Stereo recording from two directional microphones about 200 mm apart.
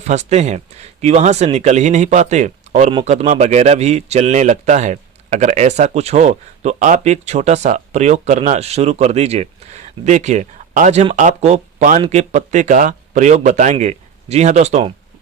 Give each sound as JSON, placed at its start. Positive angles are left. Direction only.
{"t": 0.0, "sound": "a man's voice", "side_deg": -35}